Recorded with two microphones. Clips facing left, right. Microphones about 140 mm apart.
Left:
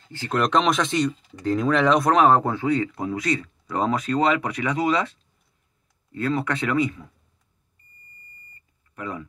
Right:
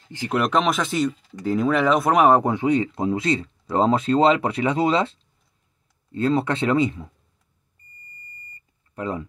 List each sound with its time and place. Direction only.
0.1 s speech: 15° right (ahead or behind)
0.4 s speech: 5° right (ahead or behind); by 7.1 s 25° right (ahead or behind)
8.9 s speech: 30° right (ahead or behind)